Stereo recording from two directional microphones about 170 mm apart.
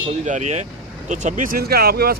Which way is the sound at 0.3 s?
45° right (ahead or behind).